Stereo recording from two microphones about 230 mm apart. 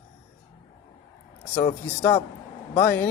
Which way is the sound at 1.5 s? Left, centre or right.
Centre.